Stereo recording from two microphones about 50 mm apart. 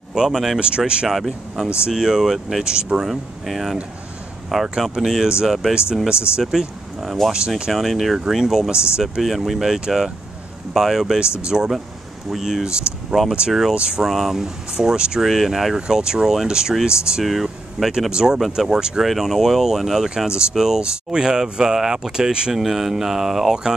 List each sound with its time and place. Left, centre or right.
0.1 s speech: centre
0.6 s speech: right
1.0 s speech: centre
3.1 s speech: centre
7.7 s speech: centre
9.2 s speech: centre
17.2 s speech: centre
18.1 s speech: centre
18.8 s speech: centre
19.0 s speech: centre